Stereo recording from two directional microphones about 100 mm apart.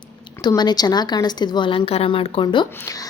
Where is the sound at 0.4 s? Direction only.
45° left (ahead or behind).